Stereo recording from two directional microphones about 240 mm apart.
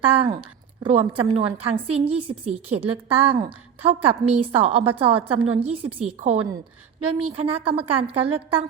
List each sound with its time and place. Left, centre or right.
0.1 s a woman's voice: right